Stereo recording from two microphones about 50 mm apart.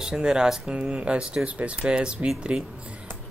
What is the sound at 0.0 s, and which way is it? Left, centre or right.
Speech, centre.